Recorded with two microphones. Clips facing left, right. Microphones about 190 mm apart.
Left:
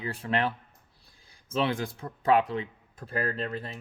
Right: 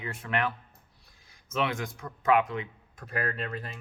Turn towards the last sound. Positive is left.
turn(degrees=30)  # may be behind; listen again after turning